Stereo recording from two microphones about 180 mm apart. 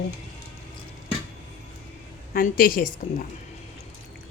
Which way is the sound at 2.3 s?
50° left (ahead or behind).